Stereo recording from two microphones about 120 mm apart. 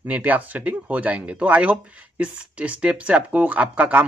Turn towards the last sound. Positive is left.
turn(degrees=-10)  # may be behind; listen again after turning